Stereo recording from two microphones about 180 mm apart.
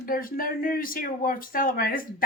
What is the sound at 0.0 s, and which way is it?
Speech, 50° left (ahead or behind).